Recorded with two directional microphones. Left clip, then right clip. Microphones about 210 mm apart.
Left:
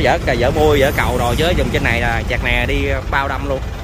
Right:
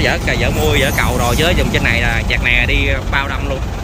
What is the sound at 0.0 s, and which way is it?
Speech, 20° left (ahead or behind).